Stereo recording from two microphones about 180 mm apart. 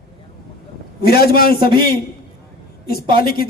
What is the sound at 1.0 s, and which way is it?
Speech, 60° left (ahead or behind).